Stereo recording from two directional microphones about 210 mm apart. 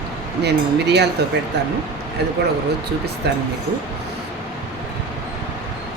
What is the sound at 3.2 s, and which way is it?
Speech, 55° right (ahead or behind).